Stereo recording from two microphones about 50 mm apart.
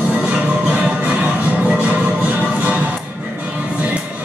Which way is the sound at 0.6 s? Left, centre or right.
Right.